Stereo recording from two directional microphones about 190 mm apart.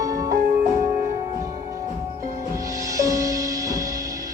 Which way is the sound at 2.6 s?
20° right (ahead or behind).